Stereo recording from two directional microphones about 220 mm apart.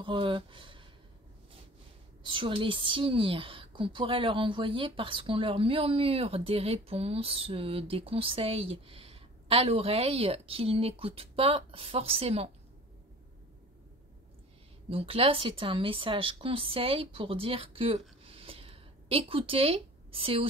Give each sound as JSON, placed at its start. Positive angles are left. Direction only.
{"t": 0.0, "sound": "speech", "side_deg": -25}
{"t": 2.2, "sound": "a woman's voice", "side_deg": -25}
{"t": 14.9, "sound": "speech", "side_deg": -25}